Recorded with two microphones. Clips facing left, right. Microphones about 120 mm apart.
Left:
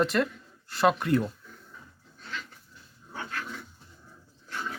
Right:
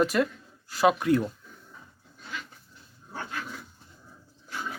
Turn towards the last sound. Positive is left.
turn(degrees=-5)  # may be behind; listen again after turning